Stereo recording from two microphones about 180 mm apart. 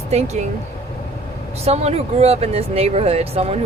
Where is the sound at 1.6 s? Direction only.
35° right (ahead or behind).